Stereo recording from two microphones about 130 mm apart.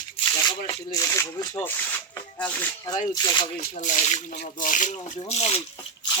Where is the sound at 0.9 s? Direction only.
25° left (ahead or behind).